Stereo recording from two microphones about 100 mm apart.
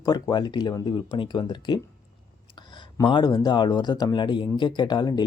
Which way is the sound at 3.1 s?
50° left (ahead or behind).